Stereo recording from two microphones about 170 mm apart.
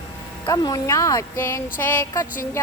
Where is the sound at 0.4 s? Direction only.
20° left (ahead or behind).